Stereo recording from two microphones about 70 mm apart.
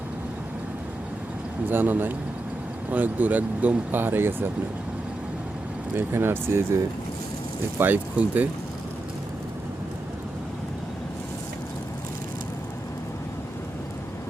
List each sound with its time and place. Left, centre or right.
1.7 s speech: right
6.0 s speech: right
7.8 s speech: right